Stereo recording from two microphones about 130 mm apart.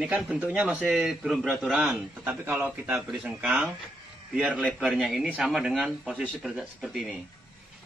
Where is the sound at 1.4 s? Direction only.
10° right (ahead or behind).